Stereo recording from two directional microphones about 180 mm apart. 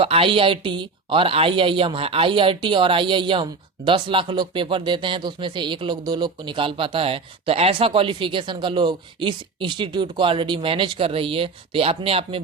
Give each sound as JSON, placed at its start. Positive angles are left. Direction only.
{"t": 0.0, "sound": "speech", "side_deg": -30}